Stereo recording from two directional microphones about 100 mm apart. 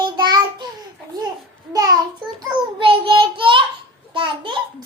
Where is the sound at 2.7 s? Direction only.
60° right (ahead or behind).